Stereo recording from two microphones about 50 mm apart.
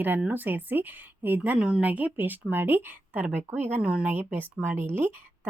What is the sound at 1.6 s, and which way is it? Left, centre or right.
A woman's voice, right.